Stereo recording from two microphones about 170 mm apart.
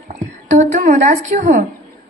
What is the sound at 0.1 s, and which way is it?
Speech, 45° right (ahead or behind).